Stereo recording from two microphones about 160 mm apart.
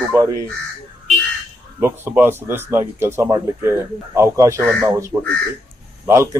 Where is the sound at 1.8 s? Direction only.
15° right (ahead or behind).